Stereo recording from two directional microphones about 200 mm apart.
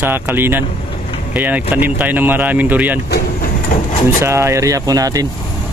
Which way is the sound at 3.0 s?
50° left (ahead or behind).